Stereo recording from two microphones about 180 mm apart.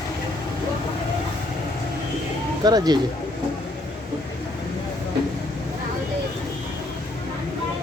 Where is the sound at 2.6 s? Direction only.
20° right (ahead or behind).